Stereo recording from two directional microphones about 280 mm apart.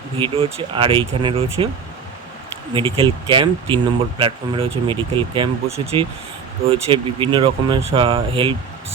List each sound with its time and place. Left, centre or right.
0.2 s speech: centre
2.7 s speech: centre